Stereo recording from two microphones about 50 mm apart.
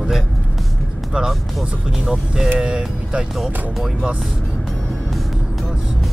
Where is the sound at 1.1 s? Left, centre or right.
Centre.